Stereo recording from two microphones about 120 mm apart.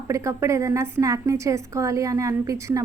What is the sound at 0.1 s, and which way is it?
A woman's voice, 25° right (ahead or behind).